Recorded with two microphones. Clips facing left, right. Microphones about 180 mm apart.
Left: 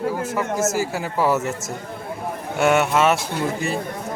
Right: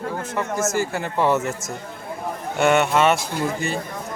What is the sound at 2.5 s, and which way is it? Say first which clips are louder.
Speech: even; 5° left (ahead or behind).